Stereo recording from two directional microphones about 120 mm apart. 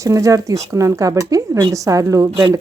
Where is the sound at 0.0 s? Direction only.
30° right (ahead or behind).